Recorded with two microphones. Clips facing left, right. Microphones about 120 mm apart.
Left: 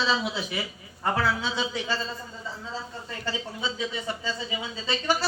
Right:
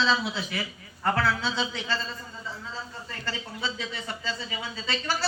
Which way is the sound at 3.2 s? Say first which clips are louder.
Left 2 dB; 15° left (ahead or behind).